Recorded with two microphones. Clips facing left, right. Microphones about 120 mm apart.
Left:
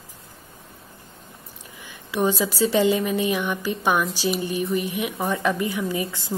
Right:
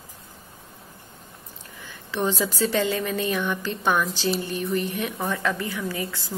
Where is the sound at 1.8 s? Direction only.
15° left (ahead or behind).